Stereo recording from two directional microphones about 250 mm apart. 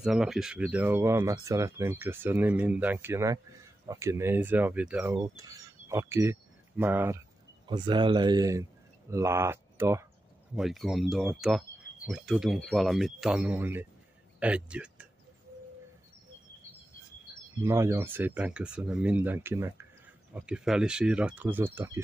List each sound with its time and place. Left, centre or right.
0.0 s speech: centre
7.6 s speech: centre
17.6 s speech: centre